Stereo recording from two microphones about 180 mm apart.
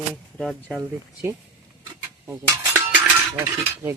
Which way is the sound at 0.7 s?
15° right (ahead or behind).